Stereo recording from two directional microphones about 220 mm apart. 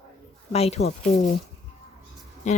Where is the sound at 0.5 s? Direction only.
30° left (ahead or behind).